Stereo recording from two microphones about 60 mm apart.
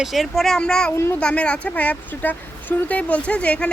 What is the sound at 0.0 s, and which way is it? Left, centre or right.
Speech, centre.